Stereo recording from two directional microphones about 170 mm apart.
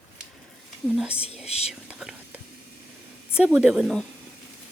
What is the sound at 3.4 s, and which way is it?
Speech, 5° right (ahead or behind).